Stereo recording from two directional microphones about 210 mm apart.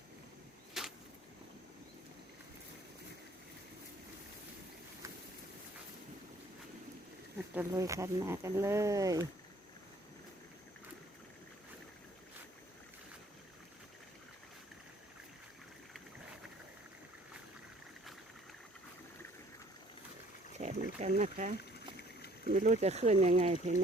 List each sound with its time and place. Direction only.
0.7 s a sound: centre (ahead or behind)
7.5 s speech: 10° right (ahead or behind)
20.5 s boat: 35° right (ahead or behind)
22.4 s speech: 35° right (ahead or behind)